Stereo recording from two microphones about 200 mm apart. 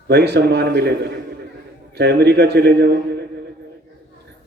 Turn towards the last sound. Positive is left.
turn(degrees=-55)  # may be behind; listen again after turning